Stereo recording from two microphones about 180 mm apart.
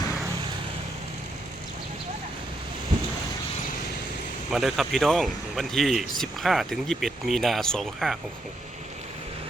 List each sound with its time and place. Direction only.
4.5 s speech: centre (ahead or behind)